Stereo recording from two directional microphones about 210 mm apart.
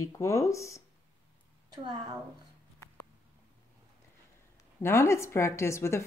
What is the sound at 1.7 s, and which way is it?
Speech, 20° right (ahead or behind).